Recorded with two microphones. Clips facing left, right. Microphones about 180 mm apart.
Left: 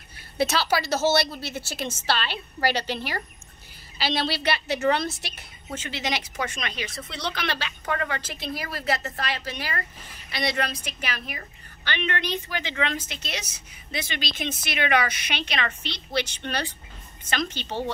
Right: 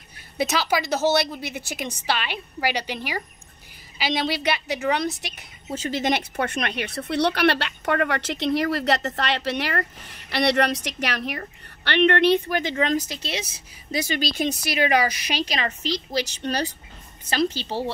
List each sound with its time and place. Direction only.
0.4 s a woman's voice: 15° right (ahead or behind)
5.8 s a woman's voice: 45° right (ahead or behind)